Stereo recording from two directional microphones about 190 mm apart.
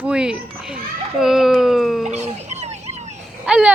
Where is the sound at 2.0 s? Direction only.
35° right (ahead or behind).